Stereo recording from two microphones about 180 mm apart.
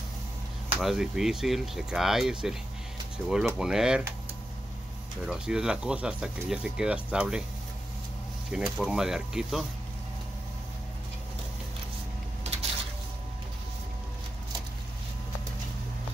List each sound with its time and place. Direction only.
0.7 s speech: centre (ahead or behind)
5.2 s speech: 5° right (ahead or behind)
8.5 s speech: 5° right (ahead or behind)